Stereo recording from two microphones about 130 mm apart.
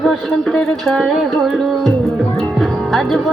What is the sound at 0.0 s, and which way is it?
Music, 5° left (ahead or behind).